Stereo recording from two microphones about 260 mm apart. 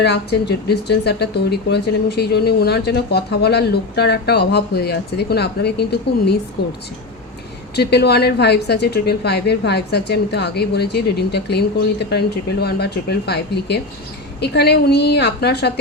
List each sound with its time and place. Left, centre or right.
0.0 s speech: left
7.8 s speech: left